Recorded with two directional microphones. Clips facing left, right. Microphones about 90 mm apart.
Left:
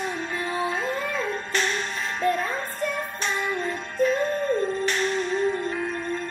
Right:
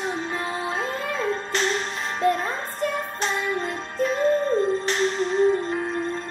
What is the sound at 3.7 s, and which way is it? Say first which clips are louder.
Music: left 2 dB; 30° right (ahead or behind).